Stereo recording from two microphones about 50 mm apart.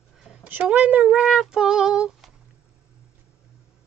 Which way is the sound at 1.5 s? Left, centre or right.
Centre.